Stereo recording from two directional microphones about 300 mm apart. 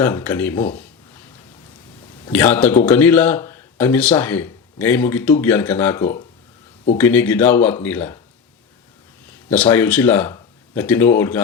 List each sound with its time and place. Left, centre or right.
0.0 s speech: centre
2.2 s speech: centre
9.5 s speech: centre